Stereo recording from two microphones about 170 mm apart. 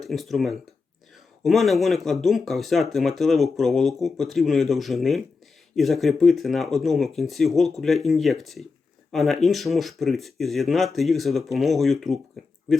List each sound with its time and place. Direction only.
0.0 s speech: centre (ahead or behind)